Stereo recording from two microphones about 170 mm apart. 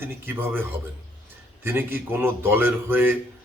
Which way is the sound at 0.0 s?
10° right (ahead or behind).